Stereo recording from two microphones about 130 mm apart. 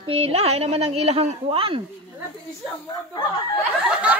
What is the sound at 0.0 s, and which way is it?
Speech, 50° right (ahead or behind).